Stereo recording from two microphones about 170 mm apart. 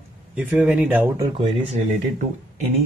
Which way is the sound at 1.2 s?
30° right (ahead or behind).